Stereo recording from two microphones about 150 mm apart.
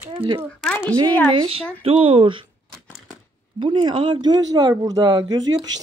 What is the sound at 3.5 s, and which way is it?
Speech, 35° right (ahead or behind).